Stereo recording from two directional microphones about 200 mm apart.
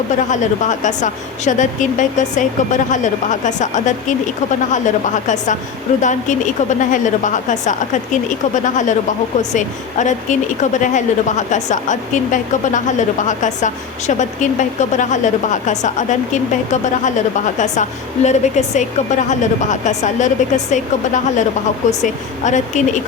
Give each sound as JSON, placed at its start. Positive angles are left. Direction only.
{"t": 0.3, "sound": "a woman's voice", "side_deg": 40}